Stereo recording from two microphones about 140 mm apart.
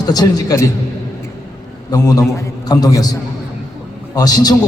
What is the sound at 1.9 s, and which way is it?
A man's voice, 25° left (ahead or behind).